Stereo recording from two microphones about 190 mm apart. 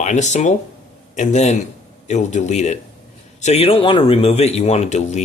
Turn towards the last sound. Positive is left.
turn(degrees=35)  # may be behind; listen again after turning